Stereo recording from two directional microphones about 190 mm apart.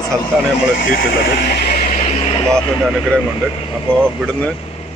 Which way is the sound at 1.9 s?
35° left (ahead or behind).